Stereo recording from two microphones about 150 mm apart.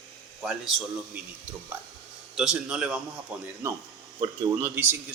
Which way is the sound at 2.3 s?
5° right (ahead or behind).